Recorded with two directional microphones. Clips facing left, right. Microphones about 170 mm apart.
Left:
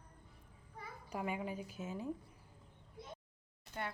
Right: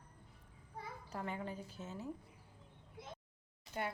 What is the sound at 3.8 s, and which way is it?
Speech, 10° right (ahead or behind).